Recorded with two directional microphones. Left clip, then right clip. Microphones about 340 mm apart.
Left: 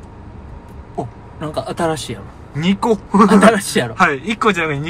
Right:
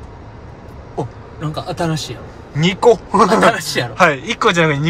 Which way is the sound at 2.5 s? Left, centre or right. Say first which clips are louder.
Right 5 dB; centre.